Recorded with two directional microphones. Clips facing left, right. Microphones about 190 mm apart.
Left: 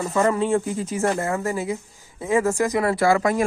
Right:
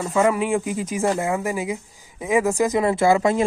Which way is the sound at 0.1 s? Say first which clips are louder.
Right 1 dB; 10° right (ahead or behind).